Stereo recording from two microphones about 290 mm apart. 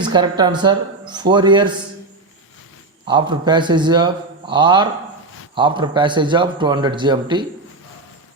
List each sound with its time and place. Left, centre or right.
0.0 s speech: centre
3.1 s speech: centre